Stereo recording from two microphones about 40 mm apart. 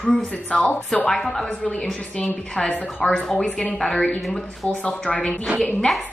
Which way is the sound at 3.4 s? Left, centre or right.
Left.